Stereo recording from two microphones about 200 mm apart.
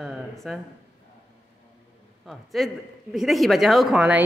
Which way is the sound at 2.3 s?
Centre (ahead or behind).